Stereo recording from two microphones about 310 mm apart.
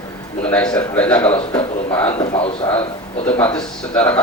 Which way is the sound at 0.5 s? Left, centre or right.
Centre.